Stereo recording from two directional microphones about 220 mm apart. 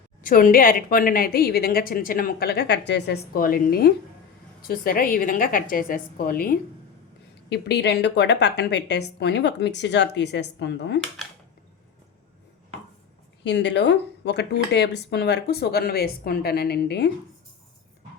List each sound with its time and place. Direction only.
0.2 s a woman's voice: 40° left (ahead or behind)
13.4 s speech: 50° left (ahead or behind)